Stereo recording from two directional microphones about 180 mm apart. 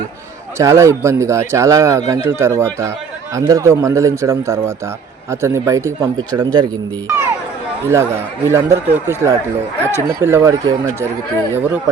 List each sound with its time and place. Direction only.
0.6 s a man's voice: 15° right (ahead or behind)
8.4 s a man's voice: 15° right (ahead or behind)